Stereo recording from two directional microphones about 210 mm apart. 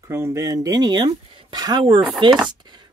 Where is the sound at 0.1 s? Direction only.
15° right (ahead or behind).